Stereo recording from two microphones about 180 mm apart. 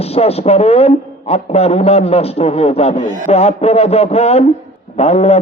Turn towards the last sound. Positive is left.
turn(degrees=35)  # may be behind; listen again after turning